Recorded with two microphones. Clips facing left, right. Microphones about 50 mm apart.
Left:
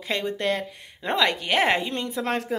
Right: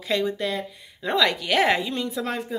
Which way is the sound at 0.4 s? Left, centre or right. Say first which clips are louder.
Left 2 dB; left.